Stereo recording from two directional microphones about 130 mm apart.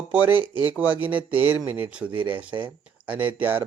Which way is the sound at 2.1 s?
40° right (ahead or behind).